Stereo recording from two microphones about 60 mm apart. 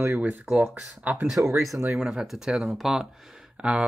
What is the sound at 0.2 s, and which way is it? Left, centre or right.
Speech, right.